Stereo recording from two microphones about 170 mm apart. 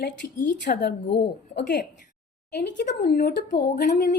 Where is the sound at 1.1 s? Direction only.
90° left.